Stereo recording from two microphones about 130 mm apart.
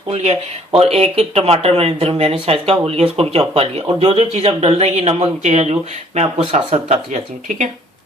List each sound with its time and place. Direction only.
0.1 s speech: 60° right (ahead or behind)